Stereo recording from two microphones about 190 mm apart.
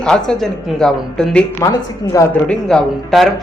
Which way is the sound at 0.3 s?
Centre (ahead or behind).